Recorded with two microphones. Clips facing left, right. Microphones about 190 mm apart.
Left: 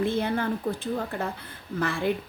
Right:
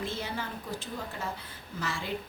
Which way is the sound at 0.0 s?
55° left (ahead or behind).